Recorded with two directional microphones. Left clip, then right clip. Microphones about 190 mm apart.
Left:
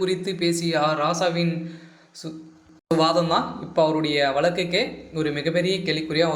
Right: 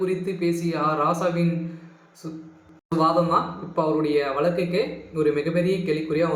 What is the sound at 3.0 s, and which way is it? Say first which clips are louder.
A man's voice: right 1 dB; 35° left (ahead or behind).